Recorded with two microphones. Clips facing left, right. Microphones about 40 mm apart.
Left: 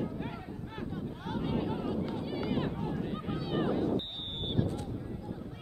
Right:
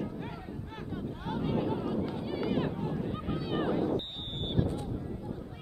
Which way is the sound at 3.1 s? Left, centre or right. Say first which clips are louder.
Right 1 dB; centre.